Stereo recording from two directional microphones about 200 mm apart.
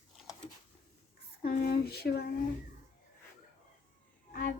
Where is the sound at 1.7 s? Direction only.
50° left (ahead or behind).